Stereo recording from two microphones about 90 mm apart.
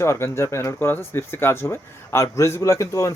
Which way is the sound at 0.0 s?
30° left (ahead or behind).